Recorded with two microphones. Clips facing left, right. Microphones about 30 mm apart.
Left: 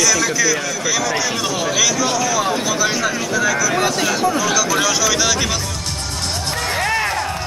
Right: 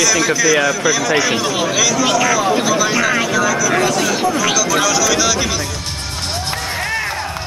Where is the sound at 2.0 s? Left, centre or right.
Right.